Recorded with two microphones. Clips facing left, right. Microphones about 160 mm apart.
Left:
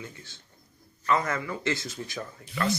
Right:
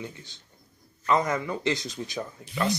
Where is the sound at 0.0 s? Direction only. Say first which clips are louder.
Right 4 dB; 20° right (ahead or behind).